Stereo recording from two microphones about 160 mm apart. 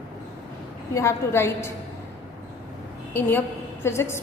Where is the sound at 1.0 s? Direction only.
15° left (ahead or behind).